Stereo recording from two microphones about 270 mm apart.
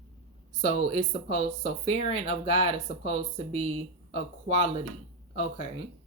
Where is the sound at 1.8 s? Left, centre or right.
Right.